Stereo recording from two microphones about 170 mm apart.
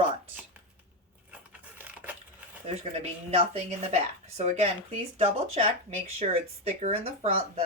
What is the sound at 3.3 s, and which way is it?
Speech, 35° right (ahead or behind).